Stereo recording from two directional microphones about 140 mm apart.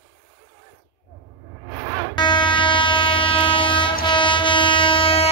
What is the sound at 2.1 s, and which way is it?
Train, 35° left (ahead or behind).